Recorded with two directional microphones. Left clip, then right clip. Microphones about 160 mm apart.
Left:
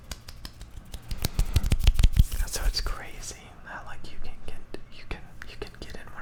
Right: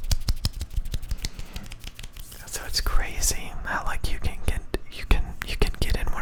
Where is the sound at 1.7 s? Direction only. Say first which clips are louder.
Left 9 dB; 65° left (ahead or behind).